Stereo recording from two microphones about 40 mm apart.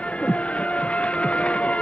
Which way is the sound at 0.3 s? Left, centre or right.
Left.